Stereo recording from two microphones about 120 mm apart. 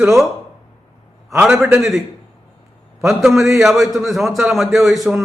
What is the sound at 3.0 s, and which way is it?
A man's voice, centre (ahead or behind).